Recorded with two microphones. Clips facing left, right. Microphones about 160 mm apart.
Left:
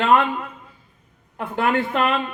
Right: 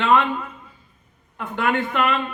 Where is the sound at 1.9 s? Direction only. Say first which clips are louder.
Left 1 dB; 35° left (ahead or behind).